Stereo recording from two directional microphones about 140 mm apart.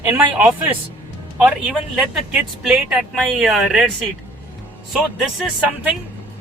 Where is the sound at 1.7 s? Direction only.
5° right (ahead or behind).